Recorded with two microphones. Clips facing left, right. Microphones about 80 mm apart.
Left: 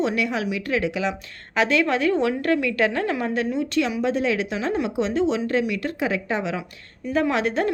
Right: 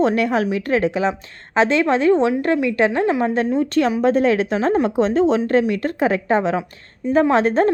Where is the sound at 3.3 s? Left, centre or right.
Right.